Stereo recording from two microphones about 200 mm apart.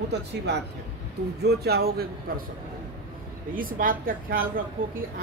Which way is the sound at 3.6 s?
45° right (ahead or behind).